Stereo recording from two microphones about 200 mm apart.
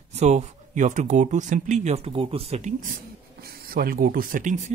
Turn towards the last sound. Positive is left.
turn(degrees=-40)  # may be behind; listen again after turning